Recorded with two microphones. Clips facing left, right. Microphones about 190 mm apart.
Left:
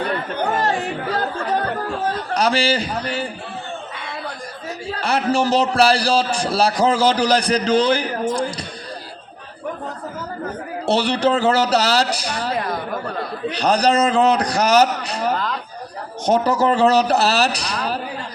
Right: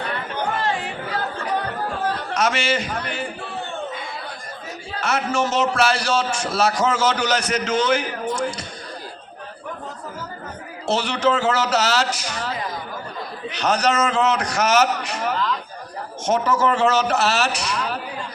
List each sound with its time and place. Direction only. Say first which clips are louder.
0.5 s chatter: left 5 dB; 45° left (ahead or behind)
2.3 s a man's voice: left 4 dB; 35° left (ahead or behind)
3.9 s a sound: even; 70° left (ahead or behind)
4.9 s a man's voice: left 3 dB; 35° left (ahead or behind)
10.8 s a man's voice: left 3 dB; 35° left (ahead or behind)
12.5 s chatter: left 6 dB; 65° left (ahead or behind)
13.5 s a man's voice: left 3 dB; 35° left (ahead or behind)